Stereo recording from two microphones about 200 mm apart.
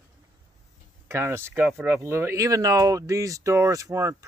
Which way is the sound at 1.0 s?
15° right (ahead or behind).